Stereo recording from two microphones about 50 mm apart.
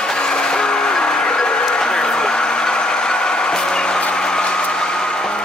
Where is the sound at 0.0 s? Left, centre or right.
Centre.